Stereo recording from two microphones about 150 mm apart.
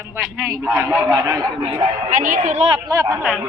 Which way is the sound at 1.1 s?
20° right (ahead or behind).